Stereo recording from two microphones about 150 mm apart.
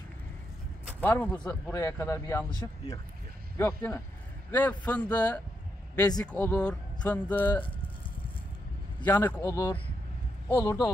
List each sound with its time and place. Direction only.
1.0 s speech: 10° left (ahead or behind)
1.7 s speech: 20° left (ahead or behind)
3.5 s speech: 15° left (ahead or behind)
9.0 s speech: 15° left (ahead or behind)